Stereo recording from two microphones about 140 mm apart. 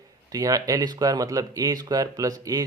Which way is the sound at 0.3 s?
25° right (ahead or behind).